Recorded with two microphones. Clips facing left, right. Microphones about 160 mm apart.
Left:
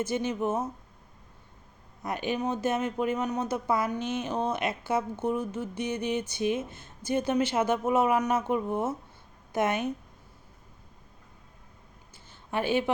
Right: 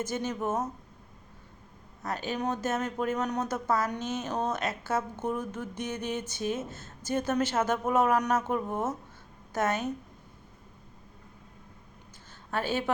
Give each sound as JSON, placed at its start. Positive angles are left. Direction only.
{"t": 0.0, "sound": "speech", "side_deg": 10}
{"t": 2.0, "sound": "speech", "side_deg": 15}
{"t": 12.5, "sound": "a woman's voice", "side_deg": 15}